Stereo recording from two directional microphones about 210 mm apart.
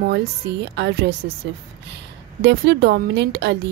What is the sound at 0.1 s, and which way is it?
A woman's voice, 55° right (ahead or behind).